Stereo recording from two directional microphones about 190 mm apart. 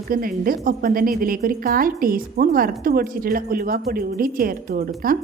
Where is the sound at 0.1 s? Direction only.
50° right (ahead or behind).